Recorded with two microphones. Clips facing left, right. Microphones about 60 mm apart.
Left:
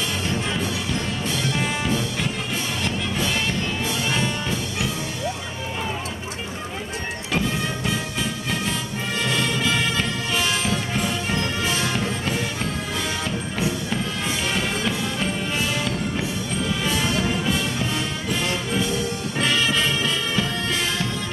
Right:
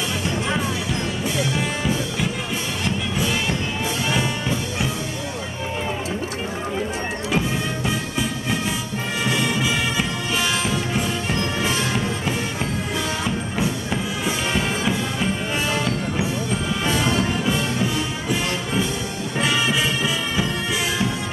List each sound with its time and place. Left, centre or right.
1.6 s music: centre
7.3 s music: centre
13.2 s music: centre
16.8 s music: right